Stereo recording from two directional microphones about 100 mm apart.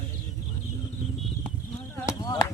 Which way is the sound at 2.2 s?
40° left (ahead or behind).